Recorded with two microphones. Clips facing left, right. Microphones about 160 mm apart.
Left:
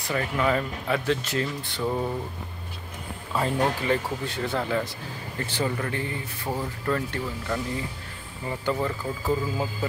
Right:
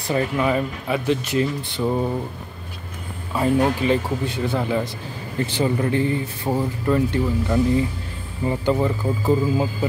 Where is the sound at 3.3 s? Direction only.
15° right (ahead or behind).